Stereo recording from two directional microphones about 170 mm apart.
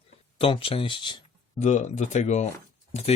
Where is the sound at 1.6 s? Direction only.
45° left (ahead or behind).